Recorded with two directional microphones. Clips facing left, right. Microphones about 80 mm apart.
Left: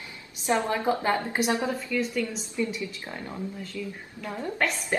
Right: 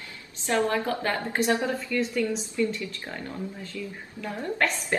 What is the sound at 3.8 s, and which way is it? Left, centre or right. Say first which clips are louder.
Speech: left 1 dB; centre.